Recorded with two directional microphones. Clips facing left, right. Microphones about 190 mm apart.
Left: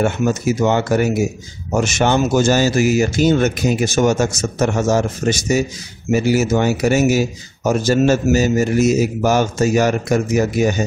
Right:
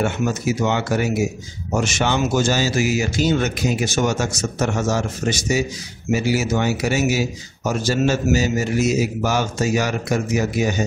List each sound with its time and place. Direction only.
0.0 s speech: 45° left (ahead or behind)